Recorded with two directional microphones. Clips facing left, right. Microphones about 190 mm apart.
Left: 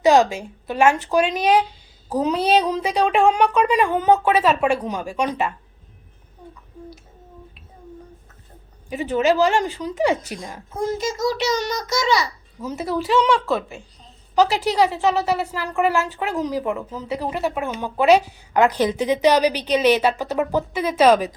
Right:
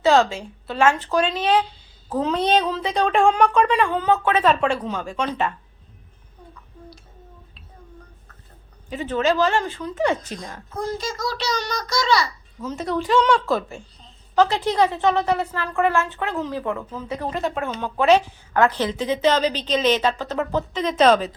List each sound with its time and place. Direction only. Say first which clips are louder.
0.0 s speech: left 2 dB; 15° left (ahead or behind)
8.9 s speech: left 2 dB; 15° left (ahead or behind)
10.8 s speech: left 4 dB; 20° left (ahead or behind)